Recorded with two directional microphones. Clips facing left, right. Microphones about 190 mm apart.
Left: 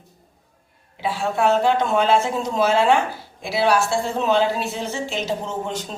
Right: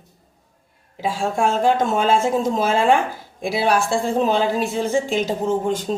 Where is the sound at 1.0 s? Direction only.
45° right (ahead or behind).